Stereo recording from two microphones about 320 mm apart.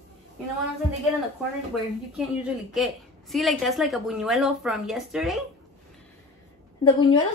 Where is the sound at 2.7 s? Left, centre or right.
Centre.